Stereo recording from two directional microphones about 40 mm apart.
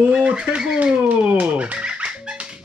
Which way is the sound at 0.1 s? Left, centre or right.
Right.